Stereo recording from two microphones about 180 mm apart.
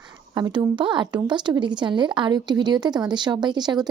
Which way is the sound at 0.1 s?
25° right (ahead or behind).